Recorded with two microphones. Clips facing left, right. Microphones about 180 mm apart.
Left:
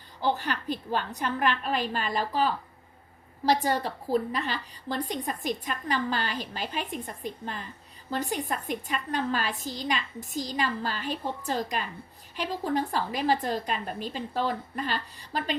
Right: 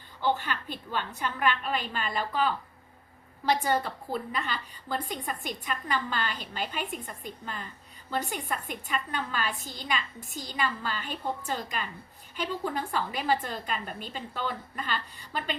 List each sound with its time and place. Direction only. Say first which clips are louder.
0.2 s a woman's voice: left 1 dB; 40° left (ahead or behind)
8.1 s a woman's voice: left 2 dB; 35° left (ahead or behind)